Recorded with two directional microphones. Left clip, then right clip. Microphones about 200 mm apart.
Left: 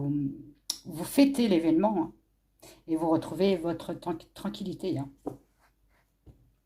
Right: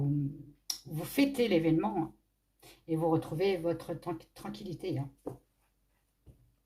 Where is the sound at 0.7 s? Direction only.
35° left (ahead or behind).